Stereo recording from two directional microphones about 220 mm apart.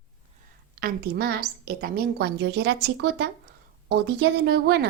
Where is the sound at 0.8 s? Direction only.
45° right (ahead or behind).